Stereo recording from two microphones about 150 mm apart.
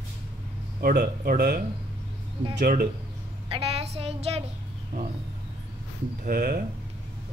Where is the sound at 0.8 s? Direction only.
80° right.